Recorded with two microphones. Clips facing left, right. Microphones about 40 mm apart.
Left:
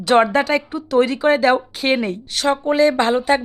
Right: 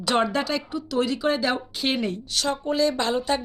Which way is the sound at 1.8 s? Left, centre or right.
Left.